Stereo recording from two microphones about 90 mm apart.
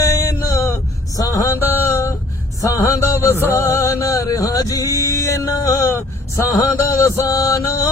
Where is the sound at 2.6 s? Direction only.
35° left (ahead or behind).